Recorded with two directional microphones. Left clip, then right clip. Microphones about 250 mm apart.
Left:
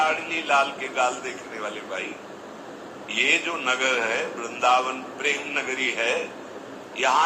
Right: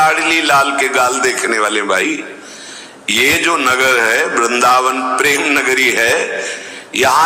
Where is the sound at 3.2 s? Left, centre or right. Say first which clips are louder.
Right 10 dB; right.